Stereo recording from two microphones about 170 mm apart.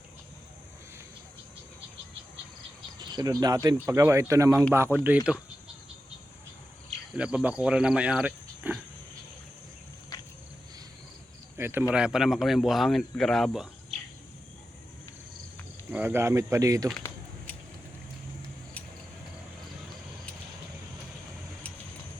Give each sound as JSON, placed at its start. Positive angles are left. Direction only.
{"t": 3.0, "sound": "speech", "side_deg": -25}
{"t": 7.2, "sound": "speech", "side_deg": -5}
{"t": 11.5, "sound": "speech", "side_deg": -15}
{"t": 15.9, "sound": "speech", "side_deg": -10}